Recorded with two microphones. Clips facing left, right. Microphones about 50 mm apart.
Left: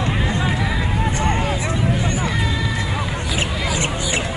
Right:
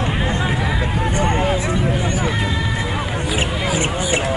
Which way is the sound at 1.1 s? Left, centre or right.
Centre.